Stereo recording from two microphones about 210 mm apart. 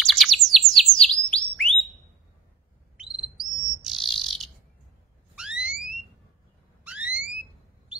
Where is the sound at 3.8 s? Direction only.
Centre (ahead or behind).